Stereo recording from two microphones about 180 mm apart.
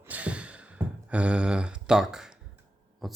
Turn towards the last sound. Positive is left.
turn(degrees=0)  # may be behind; listen again after turning